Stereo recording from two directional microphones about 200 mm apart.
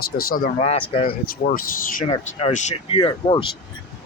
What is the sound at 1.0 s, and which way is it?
Speech, 45° left (ahead or behind).